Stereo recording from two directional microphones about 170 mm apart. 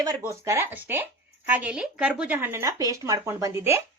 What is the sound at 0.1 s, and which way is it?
A woman's voice, 15° right (ahead or behind).